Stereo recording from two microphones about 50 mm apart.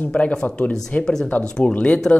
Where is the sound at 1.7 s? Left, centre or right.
Left.